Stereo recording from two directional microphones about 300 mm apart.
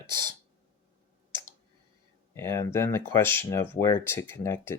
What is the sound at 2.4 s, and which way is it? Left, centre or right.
Speech, centre.